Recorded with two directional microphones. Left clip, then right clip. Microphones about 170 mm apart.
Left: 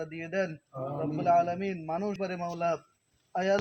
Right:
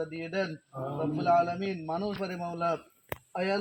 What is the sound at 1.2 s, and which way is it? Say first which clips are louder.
A man's voice: left 1 dB; 25° left (ahead or behind).